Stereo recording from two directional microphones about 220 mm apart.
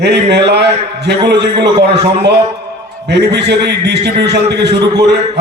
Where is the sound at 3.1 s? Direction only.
50° right (ahead or behind).